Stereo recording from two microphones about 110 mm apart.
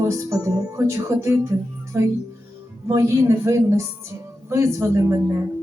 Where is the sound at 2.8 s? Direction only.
30° right (ahead or behind).